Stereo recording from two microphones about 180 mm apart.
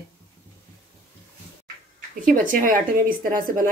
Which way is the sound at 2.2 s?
50° right (ahead or behind).